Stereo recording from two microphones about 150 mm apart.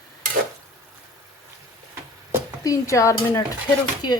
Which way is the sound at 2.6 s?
20° left (ahead or behind).